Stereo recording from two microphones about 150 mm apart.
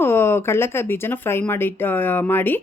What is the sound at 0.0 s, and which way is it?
Speech, 15° left (ahead or behind).